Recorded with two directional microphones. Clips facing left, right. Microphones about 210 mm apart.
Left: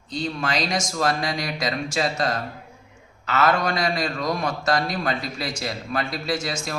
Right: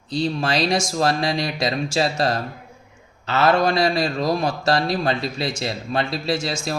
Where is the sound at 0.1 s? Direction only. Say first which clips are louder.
Right 4 dB; 30° right (ahead or behind).